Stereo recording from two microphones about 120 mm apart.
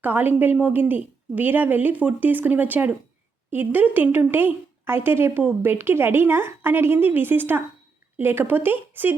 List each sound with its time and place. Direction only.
0.0 s a woman's voice: 15° right (ahead or behind)